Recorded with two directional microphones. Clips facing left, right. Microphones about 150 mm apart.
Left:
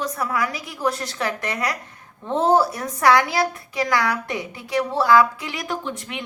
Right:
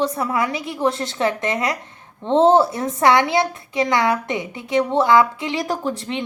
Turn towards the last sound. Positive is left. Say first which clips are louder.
# right 6 dB
turn(degrees=-30)  # may be behind; listen again after turning